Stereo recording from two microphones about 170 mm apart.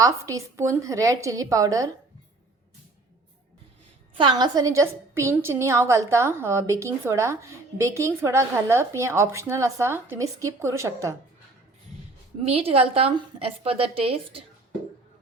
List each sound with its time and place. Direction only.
0.0 s a woman's voice: 20° right (ahead or behind)
4.2 s a woman's voice: 25° right (ahead or behind)
12.5 s a woman's voice: 35° right (ahead or behind)